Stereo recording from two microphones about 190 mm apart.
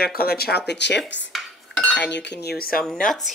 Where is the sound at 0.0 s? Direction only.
55° left (ahead or behind).